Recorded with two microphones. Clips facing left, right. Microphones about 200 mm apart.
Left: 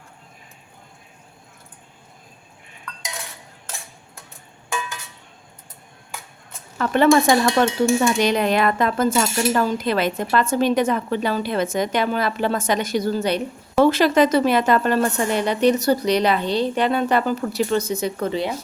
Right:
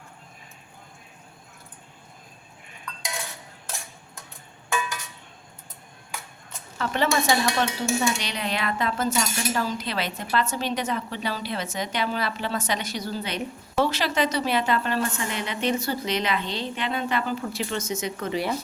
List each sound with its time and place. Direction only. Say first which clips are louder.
6.7 s a woman's voice: left 9 dB; 50° left (ahead or behind); by 18.4 s 35° left (ahead or behind)